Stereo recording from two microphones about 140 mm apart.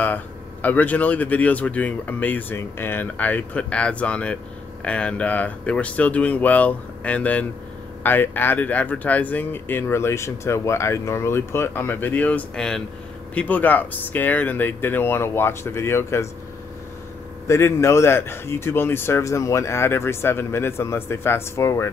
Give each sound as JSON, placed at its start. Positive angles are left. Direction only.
{"t": 0.0, "sound": "speech", "side_deg": 10}
{"t": 17.5, "sound": "speech", "side_deg": 20}